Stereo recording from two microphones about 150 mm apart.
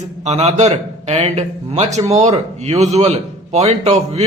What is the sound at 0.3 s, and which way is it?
Speech, 50° right (ahead or behind).